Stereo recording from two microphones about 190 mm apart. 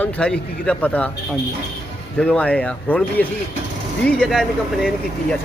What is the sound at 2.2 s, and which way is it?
Speech, 5° left (ahead or behind).